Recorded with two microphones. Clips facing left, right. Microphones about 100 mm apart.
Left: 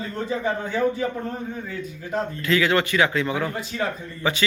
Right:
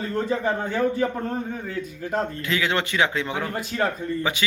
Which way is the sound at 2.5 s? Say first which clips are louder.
Left 6 dB; 20° right (ahead or behind).